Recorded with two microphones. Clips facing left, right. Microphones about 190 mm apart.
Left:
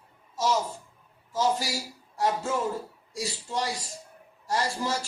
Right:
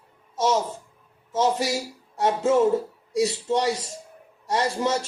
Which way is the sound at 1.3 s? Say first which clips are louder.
Right 4 dB; 70° right (ahead or behind).